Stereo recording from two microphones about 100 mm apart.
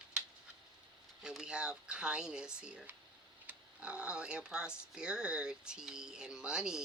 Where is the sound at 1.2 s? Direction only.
5° right (ahead or behind).